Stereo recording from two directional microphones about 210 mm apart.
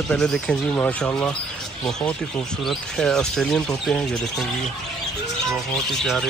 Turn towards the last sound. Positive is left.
turn(degrees=0)  # may be behind; listen again after turning